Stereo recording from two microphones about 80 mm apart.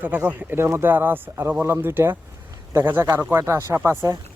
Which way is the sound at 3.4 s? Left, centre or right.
Right.